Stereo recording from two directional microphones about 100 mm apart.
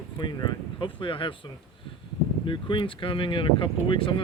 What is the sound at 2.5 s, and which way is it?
Speech, 55° left (ahead or behind).